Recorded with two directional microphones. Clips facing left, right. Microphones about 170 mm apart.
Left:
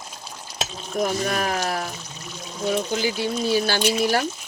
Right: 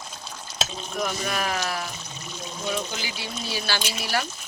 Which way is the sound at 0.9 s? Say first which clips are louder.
Left 5 dB; 40° left (ahead or behind).